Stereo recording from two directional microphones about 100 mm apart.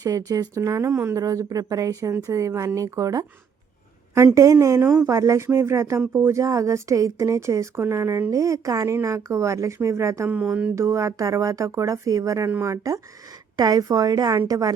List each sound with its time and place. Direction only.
0.0 s speech: 35° right (ahead or behind)
0.9 s speech: 20° right (ahead or behind)
1.1 s speech: 35° right (ahead or behind)
10.2 s speech: 15° right (ahead or behind)
10.8 s speech: 30° right (ahead or behind)